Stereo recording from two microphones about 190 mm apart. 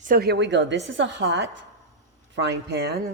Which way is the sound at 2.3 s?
65° right (ahead or behind).